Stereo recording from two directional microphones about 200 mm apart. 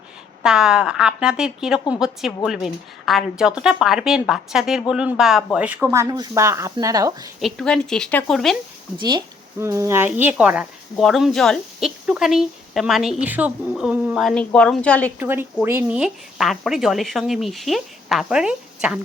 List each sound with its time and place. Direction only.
0.4 s speech: 5° right (ahead or behind)
7.3 s speech: centre (ahead or behind)
9.0 s speech: 20° right (ahead or behind); by 15.1 s 5° left (ahead or behind)
15.2 s speech: 10° right (ahead or behind)